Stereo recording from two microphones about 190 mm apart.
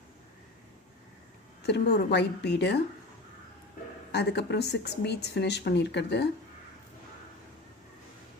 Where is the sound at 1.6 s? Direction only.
60° left (ahead or behind).